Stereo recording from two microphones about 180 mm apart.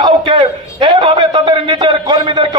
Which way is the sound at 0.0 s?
25° right (ahead or behind).